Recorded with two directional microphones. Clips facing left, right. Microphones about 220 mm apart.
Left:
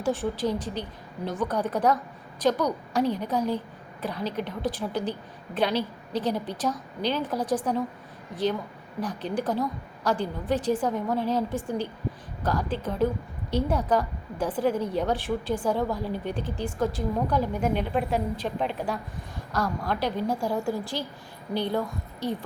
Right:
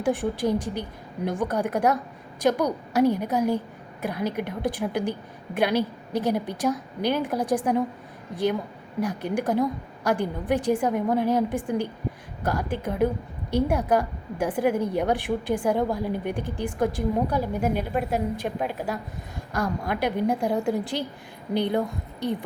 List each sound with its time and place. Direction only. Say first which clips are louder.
0.0 s a woman's voice: right 2 dB; 15° right (ahead or behind)
9.0 s a woman's voice: right 3 dB; 10° right (ahead or behind)